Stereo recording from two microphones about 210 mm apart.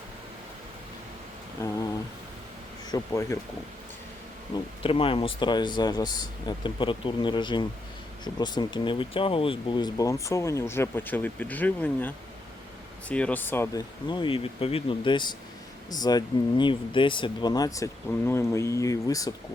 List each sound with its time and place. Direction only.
1.6 s speech: 15° left (ahead or behind)
2.9 s speech: 15° left (ahead or behind)
4.5 s speech: 25° left (ahead or behind)